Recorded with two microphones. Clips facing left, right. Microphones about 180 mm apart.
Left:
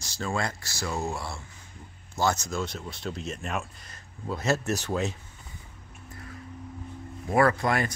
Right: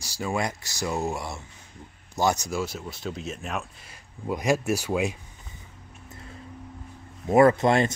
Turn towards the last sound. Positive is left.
turn(degrees=-25)  # may be behind; listen again after turning